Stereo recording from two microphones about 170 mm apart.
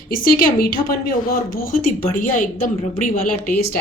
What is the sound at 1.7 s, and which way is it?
Speech, 50° left (ahead or behind).